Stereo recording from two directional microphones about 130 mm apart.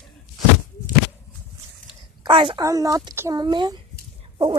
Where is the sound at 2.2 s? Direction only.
40° right (ahead or behind).